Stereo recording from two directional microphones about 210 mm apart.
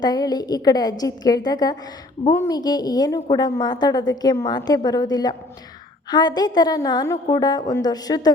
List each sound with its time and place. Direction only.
0.0 s a woman's voice: 20° left (ahead or behind)